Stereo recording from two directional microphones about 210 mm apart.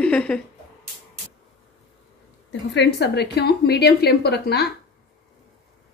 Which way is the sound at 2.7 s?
55° left (ahead or behind).